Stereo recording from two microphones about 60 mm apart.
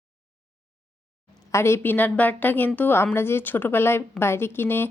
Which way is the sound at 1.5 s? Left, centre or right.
Left.